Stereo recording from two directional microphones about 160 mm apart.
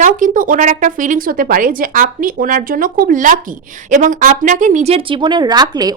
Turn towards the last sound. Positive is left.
turn(degrees=-25)  # may be behind; listen again after turning